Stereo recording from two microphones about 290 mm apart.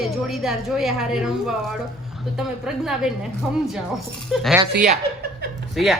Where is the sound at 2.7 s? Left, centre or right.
Centre.